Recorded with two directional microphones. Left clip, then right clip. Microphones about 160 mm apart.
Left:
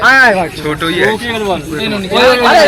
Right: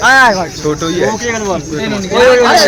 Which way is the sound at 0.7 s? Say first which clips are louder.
Left 1 dB; 65° right (ahead or behind).